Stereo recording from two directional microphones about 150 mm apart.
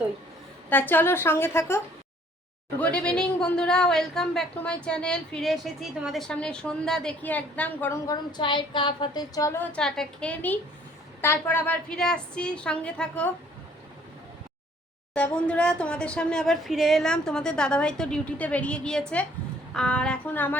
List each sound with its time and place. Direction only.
0.7 s a woman's voice: 15° left (ahead or behind)
2.8 s speech: 5° left (ahead or behind)
8.0 s a sound: 30° left (ahead or behind)
9.7 s a woman's voice: 5° left (ahead or behind)
15.1 s a woman's voice: 10° left (ahead or behind)